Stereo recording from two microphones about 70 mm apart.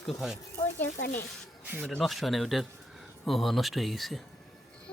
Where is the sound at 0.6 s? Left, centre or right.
Left.